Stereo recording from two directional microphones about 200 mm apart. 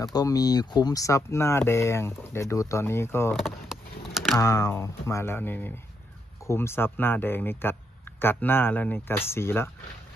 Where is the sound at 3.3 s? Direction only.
Centre (ahead or behind).